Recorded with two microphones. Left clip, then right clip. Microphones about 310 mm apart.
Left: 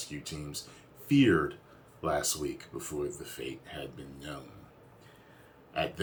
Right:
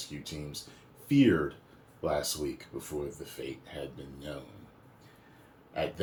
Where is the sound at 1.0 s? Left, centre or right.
Centre.